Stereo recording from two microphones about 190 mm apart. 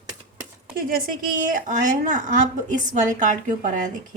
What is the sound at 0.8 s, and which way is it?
Speech, 50° right (ahead or behind).